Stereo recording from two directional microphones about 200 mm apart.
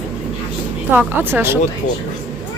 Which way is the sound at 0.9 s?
10° right (ahead or behind).